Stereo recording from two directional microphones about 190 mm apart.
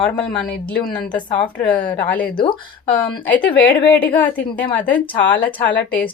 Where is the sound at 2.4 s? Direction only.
25° left (ahead or behind).